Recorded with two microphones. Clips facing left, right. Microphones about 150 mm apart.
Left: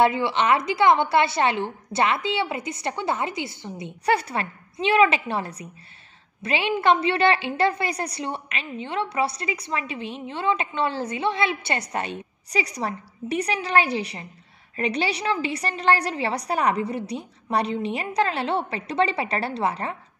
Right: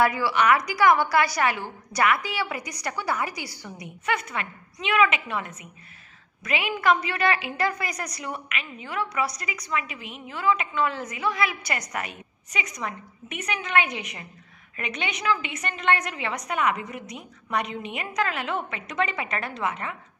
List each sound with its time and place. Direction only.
0.0 s a woman's voice: 25° left (ahead or behind)